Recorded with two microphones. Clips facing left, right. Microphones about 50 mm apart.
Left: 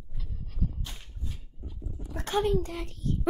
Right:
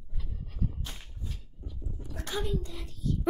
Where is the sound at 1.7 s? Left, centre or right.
Left.